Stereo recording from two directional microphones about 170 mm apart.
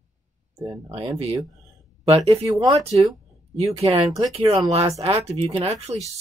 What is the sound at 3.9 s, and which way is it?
Speech, 20° right (ahead or behind).